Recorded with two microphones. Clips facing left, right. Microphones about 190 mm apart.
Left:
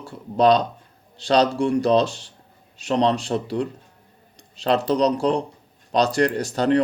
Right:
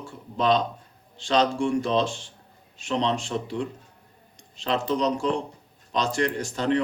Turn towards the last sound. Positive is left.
turn(degrees=35)  # may be behind; listen again after turning